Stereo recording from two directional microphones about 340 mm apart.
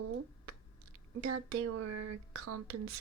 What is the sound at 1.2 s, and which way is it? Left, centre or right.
Speech, right.